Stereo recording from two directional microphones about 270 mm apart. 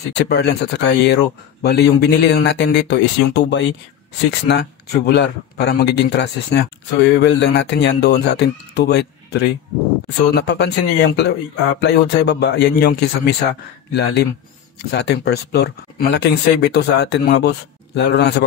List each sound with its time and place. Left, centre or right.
0.1 s a man's voice: left